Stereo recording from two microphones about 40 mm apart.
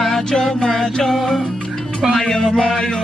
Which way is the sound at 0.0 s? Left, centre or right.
Centre.